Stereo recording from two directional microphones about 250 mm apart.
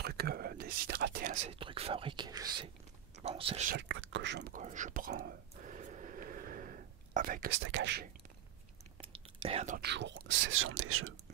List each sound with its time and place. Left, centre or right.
0.0 s whispering: right
1.5 s speech: right
3.7 s whispering: right
9.0 s whispering: right
9.8 s speech: right